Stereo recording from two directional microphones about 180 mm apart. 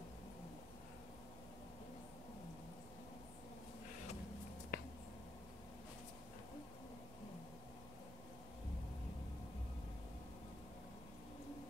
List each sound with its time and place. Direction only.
4.7 s finger snapping: 55° left (ahead or behind)